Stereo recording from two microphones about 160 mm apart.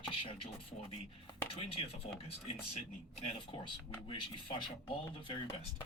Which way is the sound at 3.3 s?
30° left (ahead or behind).